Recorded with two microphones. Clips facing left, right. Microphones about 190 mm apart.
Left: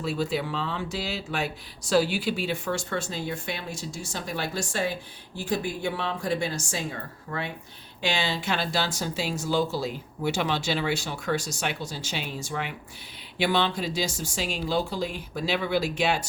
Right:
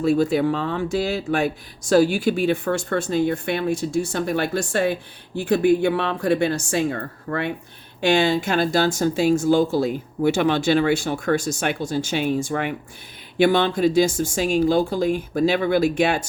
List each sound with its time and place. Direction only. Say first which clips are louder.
0.0 s speech: right 10 dB; 50° right (ahead or behind)